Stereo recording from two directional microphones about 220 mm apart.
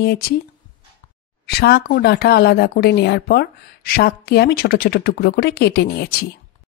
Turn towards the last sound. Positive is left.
turn(degrees=45)  # may be behind; listen again after turning